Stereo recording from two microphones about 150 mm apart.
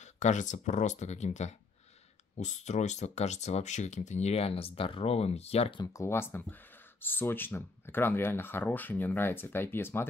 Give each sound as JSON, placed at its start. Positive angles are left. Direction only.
{"t": 0.0, "sound": "speech", "side_deg": 55}
{"t": 5.8, "sound": "speech", "side_deg": 20}